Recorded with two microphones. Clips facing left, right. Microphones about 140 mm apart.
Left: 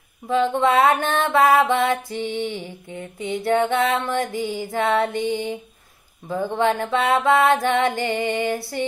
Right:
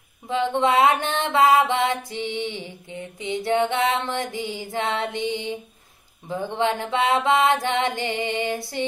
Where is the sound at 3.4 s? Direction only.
50° left (ahead or behind).